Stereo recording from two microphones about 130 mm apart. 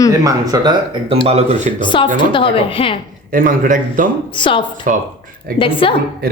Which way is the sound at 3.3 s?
90° right.